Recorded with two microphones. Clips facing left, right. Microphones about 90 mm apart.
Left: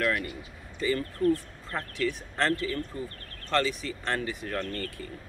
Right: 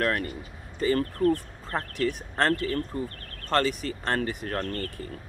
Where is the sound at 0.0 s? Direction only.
40° right (ahead or behind).